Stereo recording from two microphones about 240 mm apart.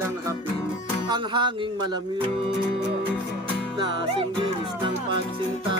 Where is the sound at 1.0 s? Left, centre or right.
Centre.